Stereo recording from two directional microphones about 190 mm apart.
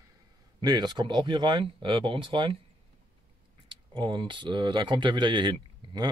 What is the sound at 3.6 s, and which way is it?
Speech, 25° right (ahead or behind).